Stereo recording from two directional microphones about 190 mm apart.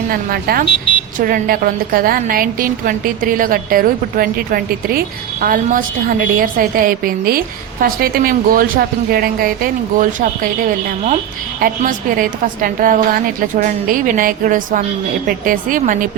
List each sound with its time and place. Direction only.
0.1 s a woman's voice: 50° right (ahead or behind)